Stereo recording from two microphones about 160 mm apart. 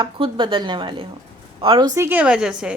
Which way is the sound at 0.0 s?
30° right (ahead or behind).